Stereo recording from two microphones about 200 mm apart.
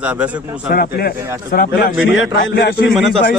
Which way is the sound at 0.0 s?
5° right (ahead or behind).